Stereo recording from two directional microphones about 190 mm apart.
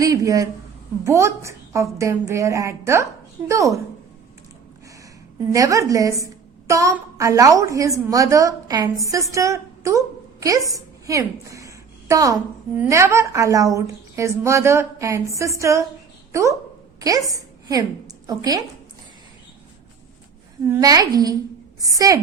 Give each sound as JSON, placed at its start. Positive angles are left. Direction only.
{"t": 0.0, "sound": "a woman's voice", "side_deg": -15}
{"t": 5.5, "sound": "a woman's voice", "side_deg": -15}
{"t": 20.7, "sound": "a woman's voice", "side_deg": -20}